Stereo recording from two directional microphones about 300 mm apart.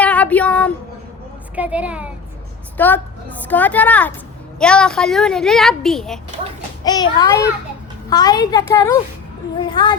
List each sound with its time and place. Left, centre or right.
0.0 s child singing: centre
1.5 s a woman's voice: centre
2.7 s a woman's voice: centre
6.8 s a woman's voice: centre